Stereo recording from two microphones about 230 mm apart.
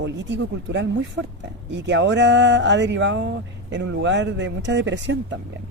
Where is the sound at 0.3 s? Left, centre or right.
Right.